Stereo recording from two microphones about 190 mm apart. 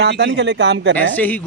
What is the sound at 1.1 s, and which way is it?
Speech, 10° left (ahead or behind).